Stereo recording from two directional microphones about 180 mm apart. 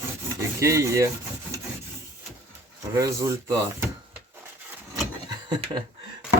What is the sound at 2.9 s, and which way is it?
Speech, 15° right (ahead or behind).